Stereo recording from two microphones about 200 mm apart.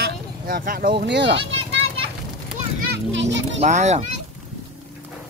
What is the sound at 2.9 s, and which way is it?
Children playing, 65° right (ahead or behind).